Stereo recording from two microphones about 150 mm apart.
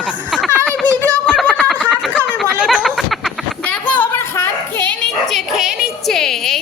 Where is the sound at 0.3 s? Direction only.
5° right (ahead or behind).